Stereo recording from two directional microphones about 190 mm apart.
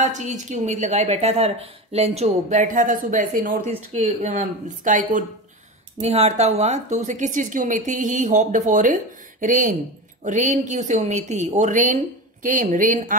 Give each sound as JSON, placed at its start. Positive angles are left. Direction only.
{"t": 0.0, "sound": "speech", "side_deg": -40}